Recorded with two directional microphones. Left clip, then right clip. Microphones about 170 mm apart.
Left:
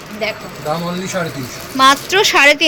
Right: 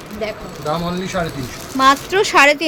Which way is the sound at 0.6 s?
10° left (ahead or behind).